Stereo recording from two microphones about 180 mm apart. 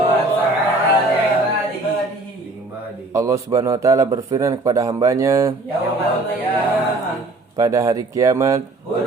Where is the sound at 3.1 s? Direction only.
15° right (ahead or behind).